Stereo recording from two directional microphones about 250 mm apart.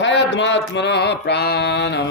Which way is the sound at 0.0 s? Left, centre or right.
Left.